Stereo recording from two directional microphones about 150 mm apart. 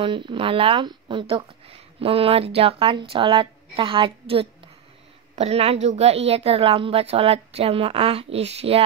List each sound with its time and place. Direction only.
0.0 s speech: 35° right (ahead or behind)